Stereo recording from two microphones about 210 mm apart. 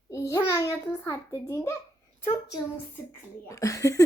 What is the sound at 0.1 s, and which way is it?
Speech, 15° left (ahead or behind).